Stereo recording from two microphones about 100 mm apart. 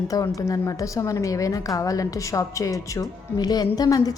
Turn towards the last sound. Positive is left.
turn(degrees=40)  # may be behind; listen again after turning